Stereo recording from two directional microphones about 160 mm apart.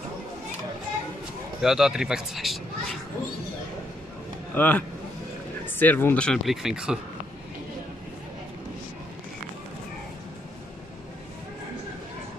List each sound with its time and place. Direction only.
1.6 s speech: 5° right (ahead or behind)
4.6 s speech: 10° left (ahead or behind)